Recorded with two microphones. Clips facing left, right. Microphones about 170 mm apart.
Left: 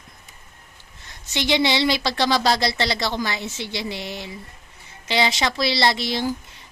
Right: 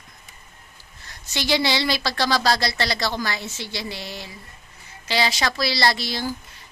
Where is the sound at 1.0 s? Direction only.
20° left (ahead or behind).